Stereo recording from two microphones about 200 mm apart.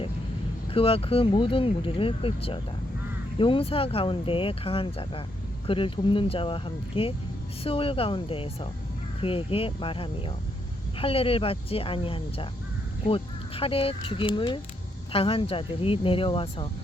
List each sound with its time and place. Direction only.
0.7 s speech: 30° left (ahead or behind)